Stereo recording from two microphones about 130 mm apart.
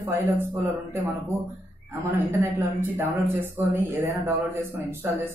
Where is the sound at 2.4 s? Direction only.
20° right (ahead or behind).